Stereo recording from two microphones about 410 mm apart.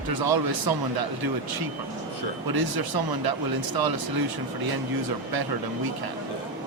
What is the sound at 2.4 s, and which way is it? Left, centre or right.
Speech, right.